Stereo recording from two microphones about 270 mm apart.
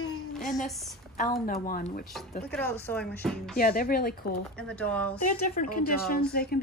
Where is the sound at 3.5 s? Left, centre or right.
Left.